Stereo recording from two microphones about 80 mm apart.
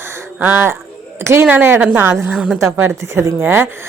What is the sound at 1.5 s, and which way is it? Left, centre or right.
A woman's voice, centre.